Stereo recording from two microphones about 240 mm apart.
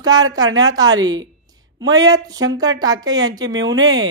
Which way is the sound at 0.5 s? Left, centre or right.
Centre.